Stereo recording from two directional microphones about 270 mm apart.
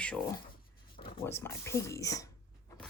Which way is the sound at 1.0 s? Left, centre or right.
Centre.